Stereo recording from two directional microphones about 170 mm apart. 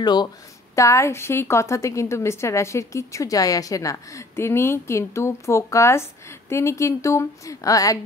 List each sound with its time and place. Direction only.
0.0 s a woman's voice: 25° left (ahead or behind)